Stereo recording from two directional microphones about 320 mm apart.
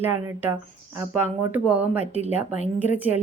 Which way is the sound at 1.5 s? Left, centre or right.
Centre.